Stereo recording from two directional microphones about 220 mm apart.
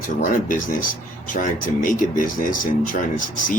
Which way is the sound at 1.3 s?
35° left (ahead or behind).